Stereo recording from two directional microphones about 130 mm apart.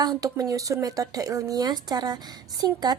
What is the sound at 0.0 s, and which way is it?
Speech, 30° right (ahead or behind).